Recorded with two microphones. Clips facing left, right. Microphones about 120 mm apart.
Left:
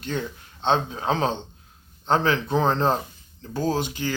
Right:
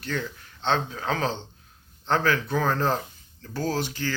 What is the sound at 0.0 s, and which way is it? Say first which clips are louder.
Speech: left 2 dB; 20° left (ahead or behind).